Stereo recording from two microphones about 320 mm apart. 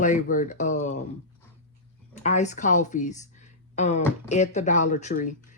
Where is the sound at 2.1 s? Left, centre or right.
Left.